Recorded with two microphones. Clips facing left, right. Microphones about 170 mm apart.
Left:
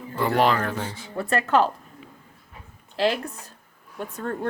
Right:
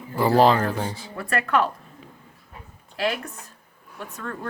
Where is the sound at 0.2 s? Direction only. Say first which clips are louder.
Right 4 dB; 35° right (ahead or behind).